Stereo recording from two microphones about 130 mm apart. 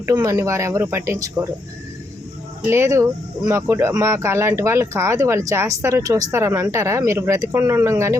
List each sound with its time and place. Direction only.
0.0 s speech: 25° right (ahead or behind)
2.6 s speech: 20° right (ahead or behind)